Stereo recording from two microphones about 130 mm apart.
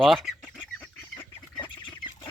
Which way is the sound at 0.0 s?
Centre (ahead or behind).